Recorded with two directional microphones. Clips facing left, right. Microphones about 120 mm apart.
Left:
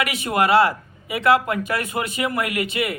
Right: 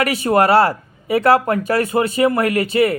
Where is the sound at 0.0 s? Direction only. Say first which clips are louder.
Right 6 dB; 35° right (ahead or behind).